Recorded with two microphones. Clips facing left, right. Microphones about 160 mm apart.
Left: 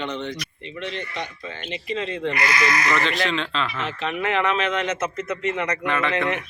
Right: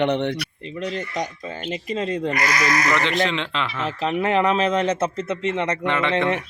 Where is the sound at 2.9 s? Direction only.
20° right (ahead or behind).